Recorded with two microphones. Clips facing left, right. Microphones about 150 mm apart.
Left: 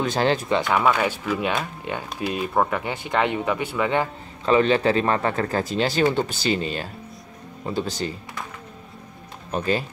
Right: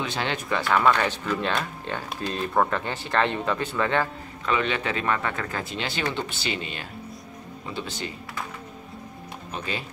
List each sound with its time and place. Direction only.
0.0 s speech: 40° left (ahead or behind)
0.5 s speech: 15° left (ahead or behind)
4.5 s speech: 35° left (ahead or behind)
9.5 s speech: 45° left (ahead or behind)